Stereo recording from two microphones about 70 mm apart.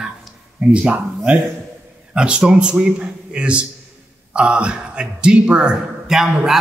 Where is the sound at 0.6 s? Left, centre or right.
Centre.